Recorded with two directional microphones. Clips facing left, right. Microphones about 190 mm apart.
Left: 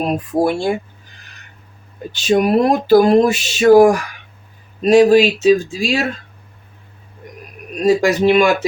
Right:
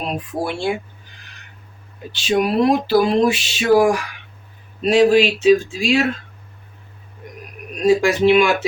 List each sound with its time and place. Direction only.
0.0 s speech: 45° left (ahead or behind)
2.1 s speech: 45° left (ahead or behind)
8.0 s speech: 40° left (ahead or behind)